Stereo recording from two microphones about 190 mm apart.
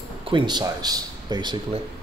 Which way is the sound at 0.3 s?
20° right (ahead or behind).